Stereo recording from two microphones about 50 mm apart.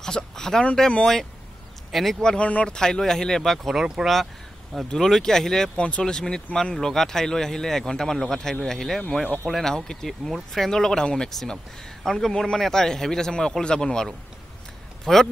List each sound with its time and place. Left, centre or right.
0.0 s a sound: centre
1.9 s speech: centre
2.2 s speech: left
2.7 s speech: centre
5.8 s speech: left
15.1 s speech: centre